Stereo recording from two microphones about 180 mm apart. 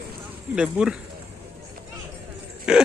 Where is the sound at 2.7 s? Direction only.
5° right (ahead or behind).